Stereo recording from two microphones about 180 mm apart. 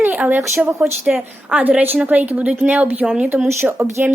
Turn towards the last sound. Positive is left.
turn(degrees=-10)  # may be behind; listen again after turning